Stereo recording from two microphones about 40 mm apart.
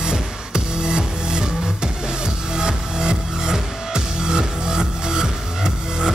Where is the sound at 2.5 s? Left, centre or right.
Centre.